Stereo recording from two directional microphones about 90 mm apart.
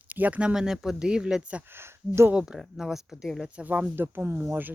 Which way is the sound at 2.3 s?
10° right (ahead or behind).